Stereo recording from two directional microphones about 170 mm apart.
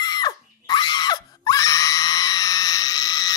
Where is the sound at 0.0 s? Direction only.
25° left (ahead or behind).